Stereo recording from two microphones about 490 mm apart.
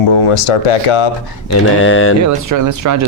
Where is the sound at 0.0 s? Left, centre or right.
Left.